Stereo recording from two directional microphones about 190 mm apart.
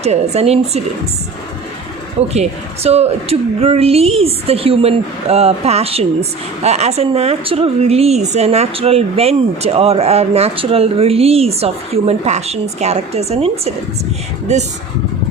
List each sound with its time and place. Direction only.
0.0 s speech: 35° right (ahead or behind)
2.3 s speech: 35° right (ahead or behind)